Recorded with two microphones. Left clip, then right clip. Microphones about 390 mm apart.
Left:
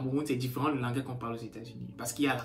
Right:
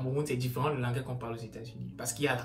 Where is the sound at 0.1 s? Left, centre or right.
Centre.